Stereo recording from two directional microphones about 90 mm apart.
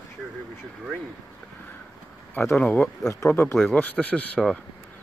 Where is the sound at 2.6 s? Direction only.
15° left (ahead or behind).